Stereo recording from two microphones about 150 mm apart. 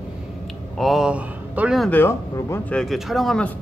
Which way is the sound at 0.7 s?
Centre (ahead or behind).